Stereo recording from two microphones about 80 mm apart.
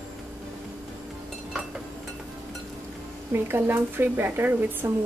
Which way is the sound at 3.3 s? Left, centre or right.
Right.